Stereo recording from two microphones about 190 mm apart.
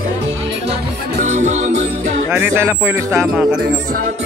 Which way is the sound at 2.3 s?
10° right (ahead or behind).